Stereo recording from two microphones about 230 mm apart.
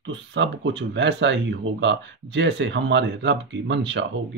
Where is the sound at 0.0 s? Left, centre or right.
Right.